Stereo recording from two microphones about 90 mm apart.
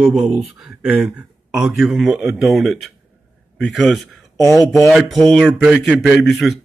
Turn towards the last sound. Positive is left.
turn(degrees=0)  # may be behind; listen again after turning